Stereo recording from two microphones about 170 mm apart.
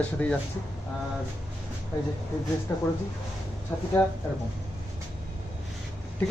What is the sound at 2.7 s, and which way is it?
Speech, 15° left (ahead or behind).